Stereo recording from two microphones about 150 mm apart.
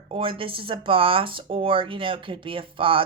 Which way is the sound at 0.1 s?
35° right (ahead or behind).